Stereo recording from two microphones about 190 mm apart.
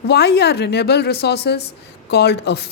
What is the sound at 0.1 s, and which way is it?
Speech, 60° left (ahead or behind).